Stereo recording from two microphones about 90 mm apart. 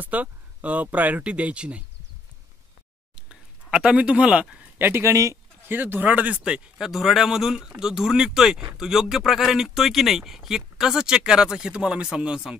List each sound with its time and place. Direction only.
0.0 s speech: 15° right (ahead or behind)
3.2 s speech: 10° right (ahead or behind); by 5.4 s 35° right (ahead or behind)
5.7 s speech: 20° right (ahead or behind)